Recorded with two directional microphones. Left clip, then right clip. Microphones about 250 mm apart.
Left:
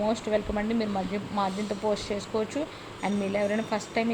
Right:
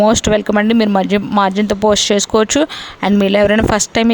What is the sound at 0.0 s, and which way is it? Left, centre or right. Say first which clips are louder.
Speech: right 15 dB; right.